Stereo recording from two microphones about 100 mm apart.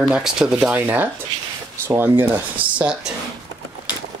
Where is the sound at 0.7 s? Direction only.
15° right (ahead or behind).